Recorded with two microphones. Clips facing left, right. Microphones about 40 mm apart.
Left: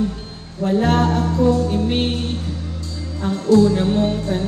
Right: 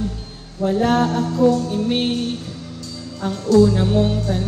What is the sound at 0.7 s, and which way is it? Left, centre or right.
Music, left.